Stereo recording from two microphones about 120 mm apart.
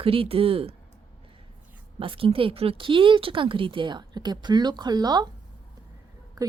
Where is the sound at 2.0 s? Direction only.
50° right (ahead or behind).